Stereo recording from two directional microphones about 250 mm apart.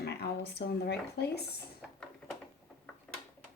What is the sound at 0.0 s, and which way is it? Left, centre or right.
Speech, left.